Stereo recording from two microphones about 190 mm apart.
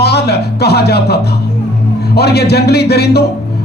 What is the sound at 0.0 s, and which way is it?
A man's voice, 60° left (ahead or behind).